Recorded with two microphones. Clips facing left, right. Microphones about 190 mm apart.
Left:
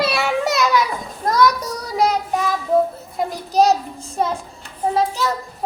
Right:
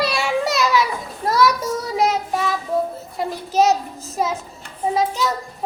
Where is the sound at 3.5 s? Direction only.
35° left (ahead or behind).